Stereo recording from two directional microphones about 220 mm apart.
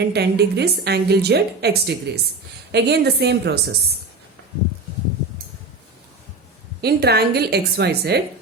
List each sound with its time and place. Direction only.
0.0 s a woman's voice: 50° right (ahead or behind)
6.8 s a woman's voice: 45° right (ahead or behind)